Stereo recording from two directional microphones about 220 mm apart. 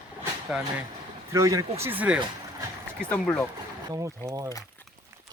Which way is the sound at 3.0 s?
5° left (ahead or behind).